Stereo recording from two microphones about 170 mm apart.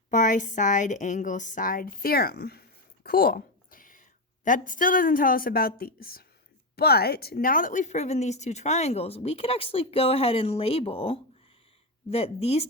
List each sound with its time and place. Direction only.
0.1 s a woman's voice: 50° left (ahead or behind)